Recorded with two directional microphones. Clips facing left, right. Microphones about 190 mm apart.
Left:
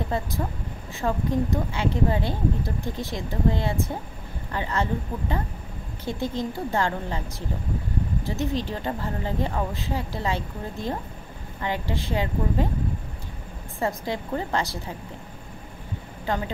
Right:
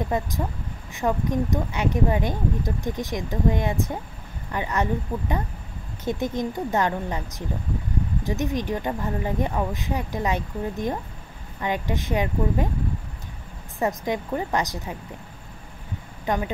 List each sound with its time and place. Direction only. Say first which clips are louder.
0.1 s speech: right 2 dB; 15° right (ahead or behind)
6.0 s speech: right 2 dB; 20° right (ahead or behind)
13.7 s speech: right 3 dB; 15° right (ahead or behind)
16.3 s speech: right 2 dB; 15° right (ahead or behind)